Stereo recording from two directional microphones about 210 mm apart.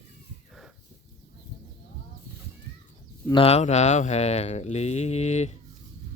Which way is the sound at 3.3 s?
30° left (ahead or behind).